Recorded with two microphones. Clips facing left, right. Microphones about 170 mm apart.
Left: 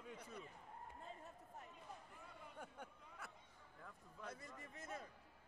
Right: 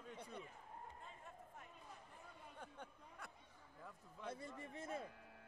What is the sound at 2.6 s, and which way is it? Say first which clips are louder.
Speech: even; 10° left (ahead or behind).